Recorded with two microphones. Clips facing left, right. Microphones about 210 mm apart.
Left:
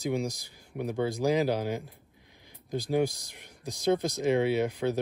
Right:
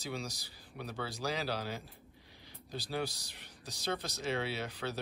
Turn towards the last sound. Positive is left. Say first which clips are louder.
# left 11 dB
turn(degrees=15)  # may be behind; listen again after turning